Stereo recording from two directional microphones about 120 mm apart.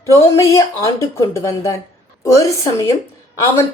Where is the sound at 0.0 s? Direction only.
25° left (ahead or behind).